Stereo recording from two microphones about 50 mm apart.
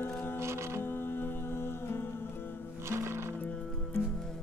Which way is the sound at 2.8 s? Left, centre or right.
Right.